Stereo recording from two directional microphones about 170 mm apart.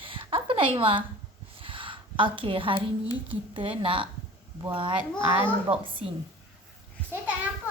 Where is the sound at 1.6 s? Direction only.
30° right (ahead or behind).